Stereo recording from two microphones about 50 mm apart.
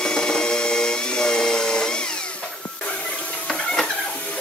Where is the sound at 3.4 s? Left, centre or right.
Centre.